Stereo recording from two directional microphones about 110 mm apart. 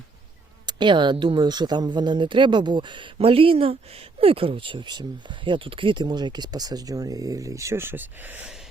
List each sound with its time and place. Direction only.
0.6 s speech: 45° right (ahead or behind); by 8.4 s 15° right (ahead or behind)